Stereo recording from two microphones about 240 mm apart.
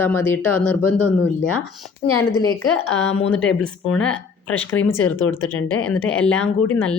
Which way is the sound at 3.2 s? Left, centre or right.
Centre.